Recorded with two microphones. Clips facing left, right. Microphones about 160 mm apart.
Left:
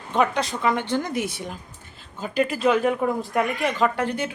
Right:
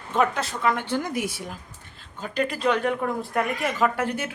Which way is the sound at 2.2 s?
5° left (ahead or behind).